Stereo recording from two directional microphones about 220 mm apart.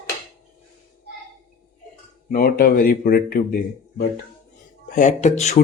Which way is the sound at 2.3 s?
40° left (ahead or behind).